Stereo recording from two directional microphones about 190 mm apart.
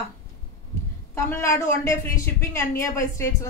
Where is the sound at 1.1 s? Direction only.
15° left (ahead or behind).